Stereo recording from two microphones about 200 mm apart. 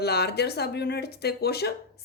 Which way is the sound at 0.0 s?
55° left (ahead or behind).